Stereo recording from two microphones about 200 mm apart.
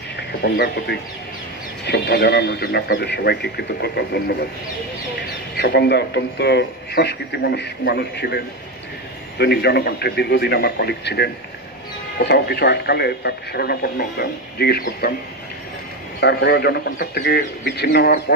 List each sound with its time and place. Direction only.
0.4 s a man's voice: 55° left (ahead or behind)
5.6 s a man's voice: 55° left (ahead or behind)
16.2 s speech: 55° left (ahead or behind)